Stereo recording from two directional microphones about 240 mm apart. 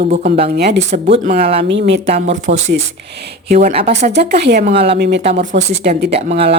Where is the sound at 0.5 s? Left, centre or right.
Right.